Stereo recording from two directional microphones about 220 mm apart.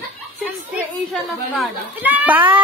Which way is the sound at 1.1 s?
5° right (ahead or behind).